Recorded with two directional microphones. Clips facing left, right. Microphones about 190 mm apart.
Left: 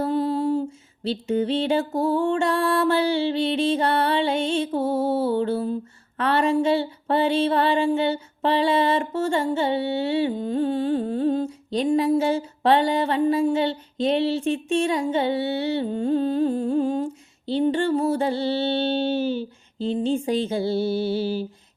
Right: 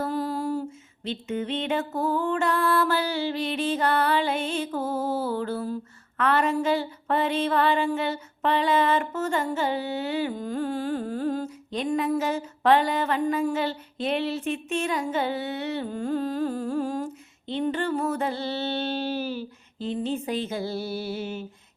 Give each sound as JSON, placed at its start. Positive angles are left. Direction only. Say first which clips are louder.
{"t": 0.0, "sound": "music", "louder": "left 5 dB", "side_deg": 25}